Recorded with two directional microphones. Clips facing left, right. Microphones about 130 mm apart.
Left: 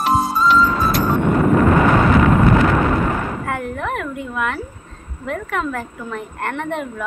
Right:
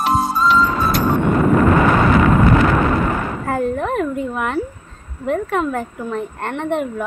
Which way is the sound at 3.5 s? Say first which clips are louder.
Right 4 dB; 30° right (ahead or behind).